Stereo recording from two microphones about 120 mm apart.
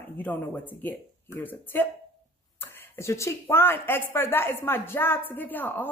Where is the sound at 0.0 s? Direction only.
15° left (ahead or behind).